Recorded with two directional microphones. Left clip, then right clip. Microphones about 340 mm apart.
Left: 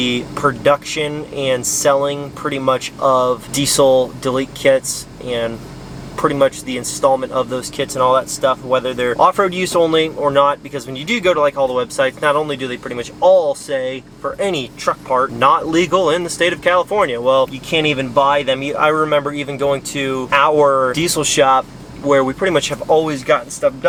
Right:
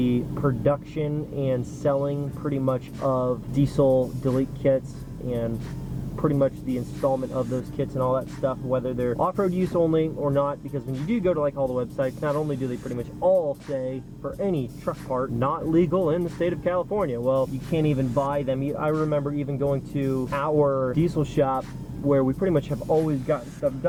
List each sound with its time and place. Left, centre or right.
0.0 s speech: centre
3.8 s speech: left
4.4 s speech: centre
13.2 s speech: left
13.7 s speech: centre